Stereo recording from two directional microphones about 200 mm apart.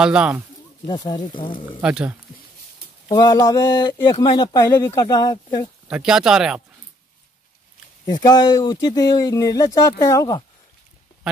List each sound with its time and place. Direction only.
0.0 s speech: 5° right (ahead or behind)
0.8 s speech: 20° left (ahead or behind)
1.8 s speech: 5° right (ahead or behind)
3.1 s speech: 20° left (ahead or behind)
5.9 s speech: 5° right (ahead or behind)
8.0 s speech: 20° left (ahead or behind)